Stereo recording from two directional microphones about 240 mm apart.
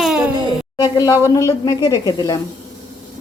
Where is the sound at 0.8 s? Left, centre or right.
Centre.